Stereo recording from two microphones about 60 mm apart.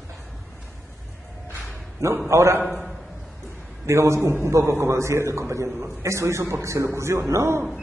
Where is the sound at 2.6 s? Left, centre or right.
Centre.